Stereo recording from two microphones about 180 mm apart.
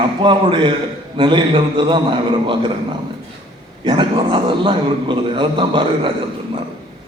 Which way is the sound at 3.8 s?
30° right (ahead or behind).